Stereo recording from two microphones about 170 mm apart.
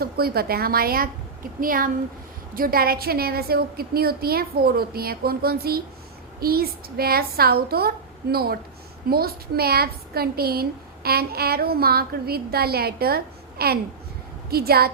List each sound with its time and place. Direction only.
0.0 s a woman's voice: 65° right (ahead or behind)